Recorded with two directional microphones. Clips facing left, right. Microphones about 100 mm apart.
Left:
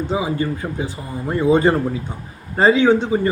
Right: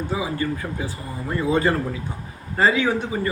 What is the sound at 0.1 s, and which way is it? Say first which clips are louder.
Speech: left 3 dB; 25° left (ahead or behind).